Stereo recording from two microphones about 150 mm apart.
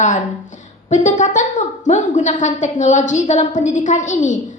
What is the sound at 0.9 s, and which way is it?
A woman's voice, 55° left (ahead or behind).